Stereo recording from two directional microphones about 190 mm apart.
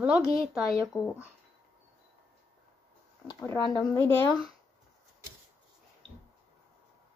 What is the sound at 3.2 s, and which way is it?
Speech, 20° left (ahead or behind).